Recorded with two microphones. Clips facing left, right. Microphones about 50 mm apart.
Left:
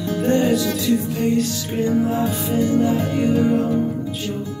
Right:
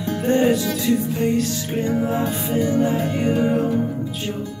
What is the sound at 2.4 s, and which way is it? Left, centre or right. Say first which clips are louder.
Music: left 1 dB; right.